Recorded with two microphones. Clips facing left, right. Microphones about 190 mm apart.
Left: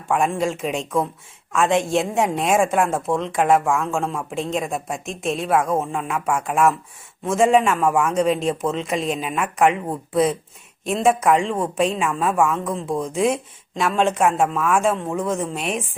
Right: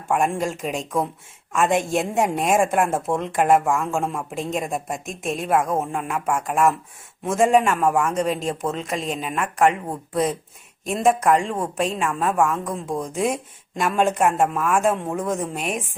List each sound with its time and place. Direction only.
0.1 s a woman's voice: 5° right (ahead or behind)
10.8 s a woman's voice: centre (ahead or behind)